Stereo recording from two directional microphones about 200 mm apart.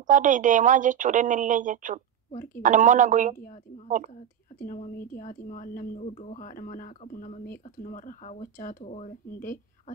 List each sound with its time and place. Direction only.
0.0 s a woman's voice: 40° right (ahead or behind)
4.6 s speech: 45° left (ahead or behind)